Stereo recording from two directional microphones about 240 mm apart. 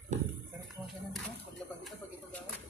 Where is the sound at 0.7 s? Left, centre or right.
Centre.